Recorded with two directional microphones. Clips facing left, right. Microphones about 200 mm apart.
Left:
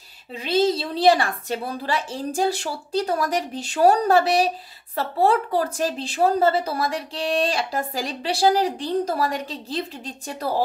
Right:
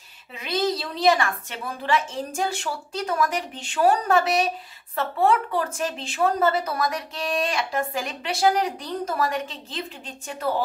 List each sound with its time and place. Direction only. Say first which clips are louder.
0.4 s speech: left 5 dB; 30° left (ahead or behind)